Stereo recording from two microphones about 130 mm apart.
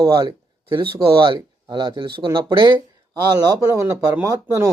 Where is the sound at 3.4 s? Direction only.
30° right (ahead or behind).